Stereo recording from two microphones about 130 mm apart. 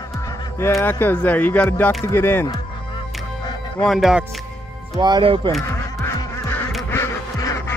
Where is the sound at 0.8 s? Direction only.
15° left (ahead or behind).